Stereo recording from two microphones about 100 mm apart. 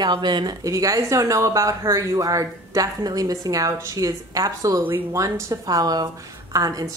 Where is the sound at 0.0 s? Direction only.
45° right (ahead or behind).